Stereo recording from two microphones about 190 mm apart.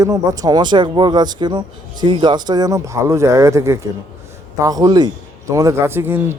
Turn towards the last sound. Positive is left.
turn(degrees=-10)  # may be behind; listen again after turning